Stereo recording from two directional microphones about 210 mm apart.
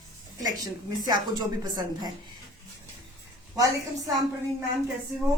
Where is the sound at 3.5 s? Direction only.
15° right (ahead or behind).